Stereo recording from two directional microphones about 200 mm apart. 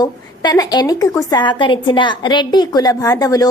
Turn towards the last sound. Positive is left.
turn(degrees=20)  # may be behind; listen again after turning